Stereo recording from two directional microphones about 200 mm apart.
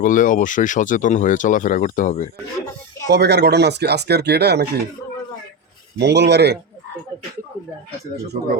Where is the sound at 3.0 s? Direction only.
55° right (ahead or behind).